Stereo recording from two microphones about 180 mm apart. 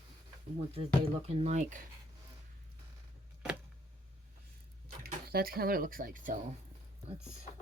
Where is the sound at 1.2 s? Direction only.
35° right (ahead or behind).